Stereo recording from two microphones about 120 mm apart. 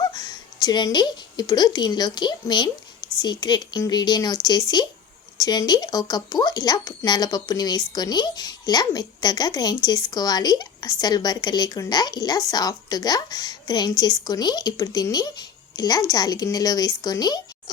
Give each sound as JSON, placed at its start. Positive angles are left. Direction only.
{"t": 0.0, "sound": "a woman's voice", "side_deg": 30}